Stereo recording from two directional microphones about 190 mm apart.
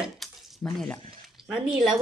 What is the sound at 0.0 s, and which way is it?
Dishes, centre (ahead or behind).